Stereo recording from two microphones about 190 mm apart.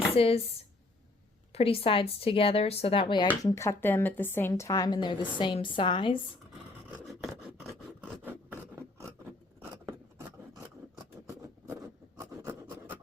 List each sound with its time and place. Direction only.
0.1 s speech: 30° left (ahead or behind)
1.5 s speech: 30° left (ahead or behind)
3.2 s speech: 15° left (ahead or behind)
8.0 s filing: 10° right (ahead or behind)
11.4 s a sound: 15° right (ahead or behind)